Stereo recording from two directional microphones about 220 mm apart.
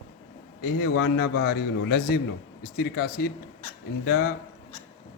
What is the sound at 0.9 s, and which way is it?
A man's voice, 50° left (ahead or behind).